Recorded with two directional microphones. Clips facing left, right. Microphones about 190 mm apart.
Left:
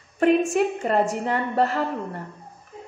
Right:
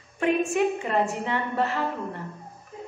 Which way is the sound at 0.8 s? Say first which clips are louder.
Left 4 dB; 40° left (ahead or behind).